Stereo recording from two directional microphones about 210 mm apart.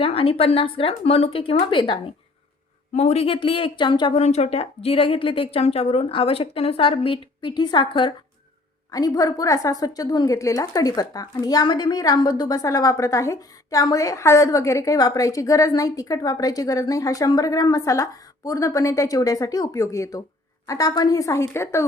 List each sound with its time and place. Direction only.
0.0 s a woman's voice: 25° left (ahead or behind)